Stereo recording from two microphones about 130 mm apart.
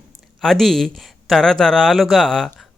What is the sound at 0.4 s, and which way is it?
Speech, centre (ahead or behind).